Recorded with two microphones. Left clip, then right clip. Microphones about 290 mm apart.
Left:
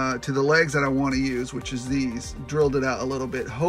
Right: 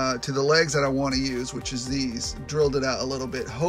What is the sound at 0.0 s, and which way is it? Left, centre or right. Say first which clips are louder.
Speech: left 1 dB; centre.